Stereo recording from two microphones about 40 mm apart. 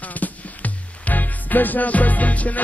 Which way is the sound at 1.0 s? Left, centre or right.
Left.